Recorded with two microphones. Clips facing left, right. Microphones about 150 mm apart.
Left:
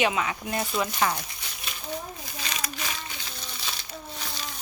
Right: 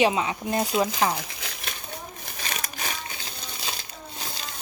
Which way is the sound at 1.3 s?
90° right.